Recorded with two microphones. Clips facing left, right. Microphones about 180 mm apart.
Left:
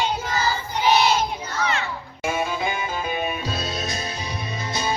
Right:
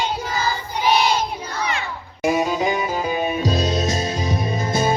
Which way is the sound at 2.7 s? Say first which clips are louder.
Right 5 dB; 30° right (ahead or behind).